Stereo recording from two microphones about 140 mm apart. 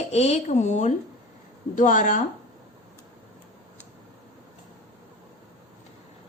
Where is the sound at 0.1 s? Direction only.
50° left (ahead or behind).